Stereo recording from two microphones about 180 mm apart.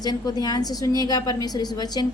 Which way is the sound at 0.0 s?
20° left (ahead or behind).